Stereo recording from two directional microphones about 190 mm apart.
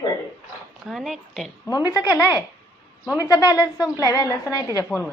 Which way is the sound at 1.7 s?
20° left (ahead or behind).